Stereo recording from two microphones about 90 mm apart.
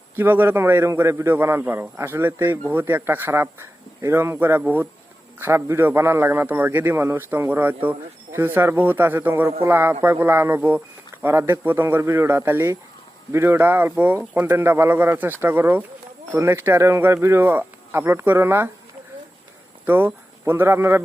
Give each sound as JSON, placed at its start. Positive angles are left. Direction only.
{"t": 0.2, "sound": "a man's voice", "side_deg": -20}
{"t": 5.4, "sound": "a man's voice", "side_deg": -30}
{"t": 19.8, "sound": "speech", "side_deg": -20}